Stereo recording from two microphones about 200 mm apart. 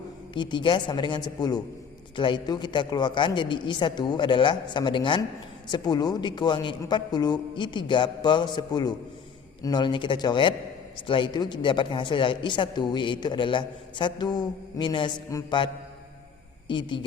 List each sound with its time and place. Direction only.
0.3 s a woman's voice: 25° left (ahead or behind)